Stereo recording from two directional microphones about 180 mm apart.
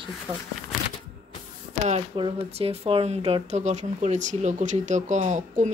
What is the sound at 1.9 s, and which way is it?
Speech, 30° right (ahead or behind).